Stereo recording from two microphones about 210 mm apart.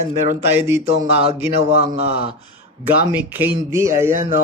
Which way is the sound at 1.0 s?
30° right (ahead or behind).